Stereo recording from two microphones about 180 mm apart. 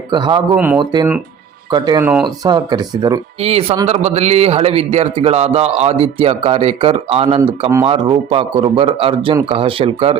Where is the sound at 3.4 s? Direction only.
35° right (ahead or behind).